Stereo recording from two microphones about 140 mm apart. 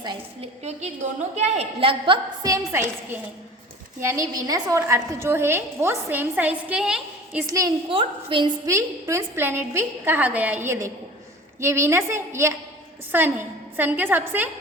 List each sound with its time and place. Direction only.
1.4 s a woman's voice: 45° right (ahead or behind)
2.4 s a woman's voice: 20° right (ahead or behind)
7.4 s a woman's voice: 25° right (ahead or behind)
7.9 s a woman's voice: 40° right (ahead or behind)
8.6 s a woman's voice: 20° right (ahead or behind)